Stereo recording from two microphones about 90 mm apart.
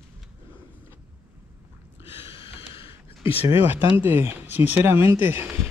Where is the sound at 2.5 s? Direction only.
80° left.